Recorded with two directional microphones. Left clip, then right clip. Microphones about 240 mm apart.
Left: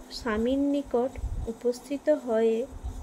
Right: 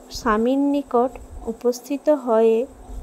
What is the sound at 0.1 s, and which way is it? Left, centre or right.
Speech, right.